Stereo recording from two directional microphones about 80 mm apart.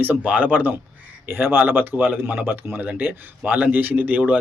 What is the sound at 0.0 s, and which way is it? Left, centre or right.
Speech, right.